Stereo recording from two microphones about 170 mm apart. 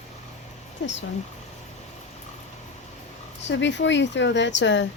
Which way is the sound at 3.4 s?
90° left.